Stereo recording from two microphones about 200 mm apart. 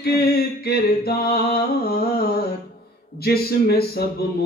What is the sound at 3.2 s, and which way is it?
Speech, 50° left (ahead or behind).